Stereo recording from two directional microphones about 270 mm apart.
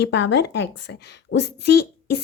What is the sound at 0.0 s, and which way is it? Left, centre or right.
A woman's voice, left.